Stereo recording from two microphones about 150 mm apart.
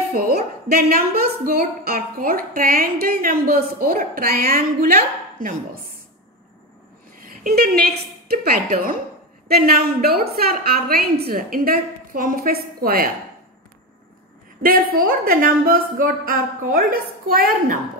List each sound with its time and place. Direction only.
0.1 s a woman's voice: 85° right
5.4 s speech: 65° right (ahead or behind)
7.2 s a sound: 75° right (ahead or behind)
8.3 s a woman's voice: 85° right
9.7 s a woman's voice: 90° right
14.6 s a woman's voice: 85° right